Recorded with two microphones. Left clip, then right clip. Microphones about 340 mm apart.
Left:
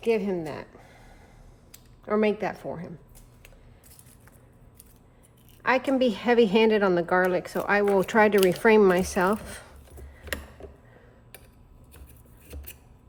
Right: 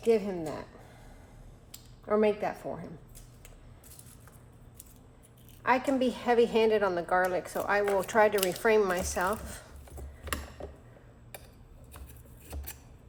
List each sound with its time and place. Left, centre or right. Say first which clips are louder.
0.0 s speech: left 2 dB; left
2.0 s a woman's voice: left 2 dB; left
6.0 s a woman's voice: left 4 dB; left
10.6 s a sound: right 1 dB; centre